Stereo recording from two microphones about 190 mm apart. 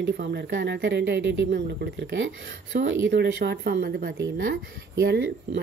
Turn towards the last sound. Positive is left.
turn(degrees=-60)  # may be behind; listen again after turning